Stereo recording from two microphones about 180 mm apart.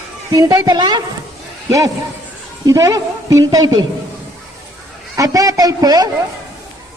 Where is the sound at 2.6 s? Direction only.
20° right (ahead or behind).